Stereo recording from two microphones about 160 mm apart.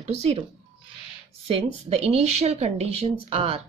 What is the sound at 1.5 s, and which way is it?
Speech, 40° right (ahead or behind).